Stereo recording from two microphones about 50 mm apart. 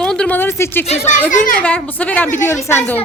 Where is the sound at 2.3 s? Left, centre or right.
Left.